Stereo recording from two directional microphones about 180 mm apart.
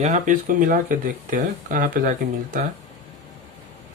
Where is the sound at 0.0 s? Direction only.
45° right (ahead or behind).